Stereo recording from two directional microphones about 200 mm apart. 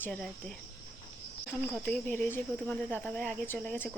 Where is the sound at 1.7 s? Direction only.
5° left (ahead or behind).